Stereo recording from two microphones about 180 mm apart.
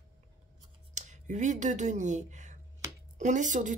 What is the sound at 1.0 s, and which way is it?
Speech, 40° right (ahead or behind).